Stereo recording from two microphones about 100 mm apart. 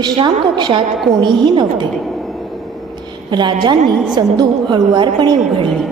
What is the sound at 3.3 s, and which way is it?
A woman's voice, 45° right (ahead or behind).